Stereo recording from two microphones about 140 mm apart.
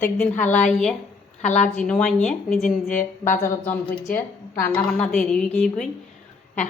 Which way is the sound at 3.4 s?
15° left (ahead or behind).